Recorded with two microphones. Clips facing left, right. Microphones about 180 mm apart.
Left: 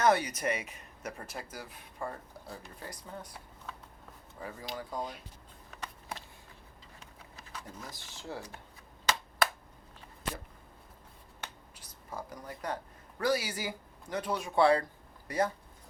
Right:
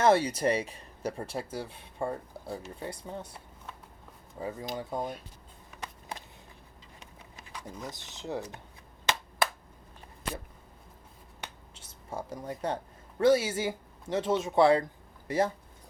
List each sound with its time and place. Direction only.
0.0 s speech: 30° right (ahead or behind)
4.4 s speech: 25° right (ahead or behind)
7.5 s speech: 20° right (ahead or behind)
11.7 s speech: 25° right (ahead or behind)